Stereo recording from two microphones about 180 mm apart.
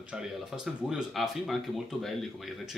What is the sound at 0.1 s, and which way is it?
Speech, 5° right (ahead or behind).